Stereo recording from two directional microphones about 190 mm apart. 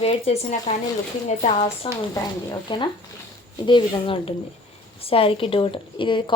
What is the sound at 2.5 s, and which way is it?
Speech, 25° left (ahead or behind).